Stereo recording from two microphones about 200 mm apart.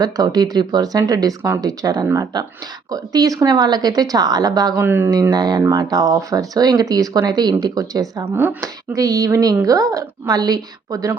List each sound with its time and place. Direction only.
0.0 s a woman's voice: 20° right (ahead or behind)